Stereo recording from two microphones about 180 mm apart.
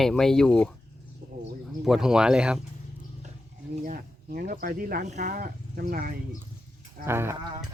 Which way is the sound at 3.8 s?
50° right (ahead or behind).